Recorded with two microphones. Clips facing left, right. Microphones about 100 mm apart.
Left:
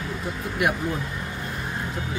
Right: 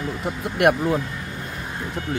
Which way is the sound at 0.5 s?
65° right (ahead or behind).